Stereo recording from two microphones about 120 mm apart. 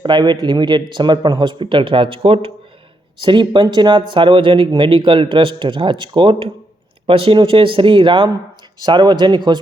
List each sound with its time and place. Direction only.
0.0 s speech: 40° right (ahead or behind)